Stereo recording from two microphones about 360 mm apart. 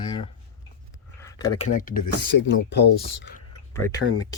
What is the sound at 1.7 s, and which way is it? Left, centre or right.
Speech, left.